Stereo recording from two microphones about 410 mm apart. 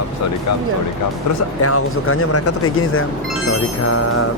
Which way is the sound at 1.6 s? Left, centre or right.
Left.